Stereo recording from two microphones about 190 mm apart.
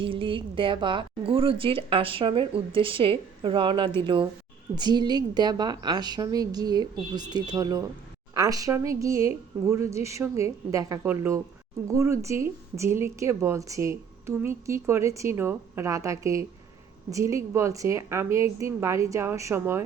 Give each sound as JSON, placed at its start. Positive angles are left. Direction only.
{"t": 0.0, "sound": "a woman's voice", "side_deg": -25}